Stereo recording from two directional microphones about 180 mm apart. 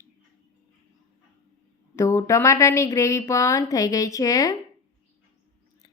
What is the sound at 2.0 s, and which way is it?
A woman's voice, 15° left (ahead or behind).